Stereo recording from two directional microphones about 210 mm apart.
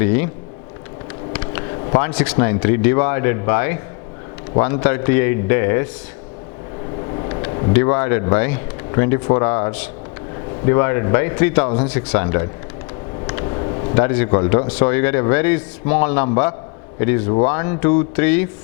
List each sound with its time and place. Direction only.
0.0 s speech: 10° left (ahead or behind)
1.3 s a sound: 15° left (ahead or behind)
2.0 s speech: 10° left (ahead or behind)
7.1 s vehicle: 25° left (ahead or behind)
7.7 s speech: 15° left (ahead or behind)
13.4 s a sound: 25° left (ahead or behind)
14.0 s speech: 10° left (ahead or behind)